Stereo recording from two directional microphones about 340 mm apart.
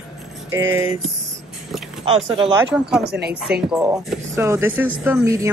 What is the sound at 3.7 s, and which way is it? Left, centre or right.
A woman's voice, centre.